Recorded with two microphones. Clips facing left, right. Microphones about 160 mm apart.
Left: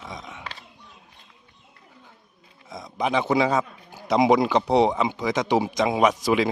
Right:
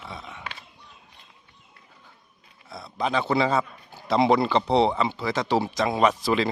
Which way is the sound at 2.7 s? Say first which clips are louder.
Left 2 dB; 15° left (ahead or behind).